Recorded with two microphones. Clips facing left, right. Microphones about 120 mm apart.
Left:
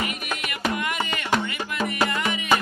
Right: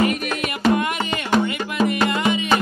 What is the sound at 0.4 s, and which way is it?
Music, 30° right (ahead or behind).